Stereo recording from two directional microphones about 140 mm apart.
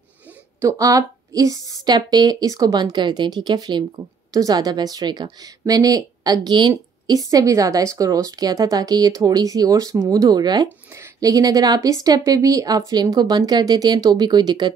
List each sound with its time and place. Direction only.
0.6 s a woman's voice: 20° right (ahead or behind)